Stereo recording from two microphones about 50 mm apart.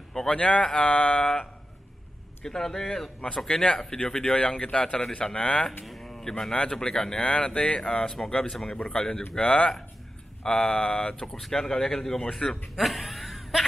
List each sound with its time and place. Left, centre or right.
0.1 s speech: centre
0.4 s speech: left
2.4 s speech: centre
5.9 s a sound: centre
6.5 s a man's voice: centre
8.9 s speech: centre
10.4 s a man's voice: centre
12.7 s a sound: centre